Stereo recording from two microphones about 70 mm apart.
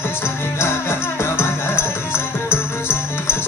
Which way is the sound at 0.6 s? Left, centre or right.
Left.